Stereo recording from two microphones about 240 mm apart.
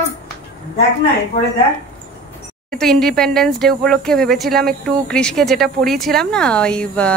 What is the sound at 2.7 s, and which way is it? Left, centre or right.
Speech, centre.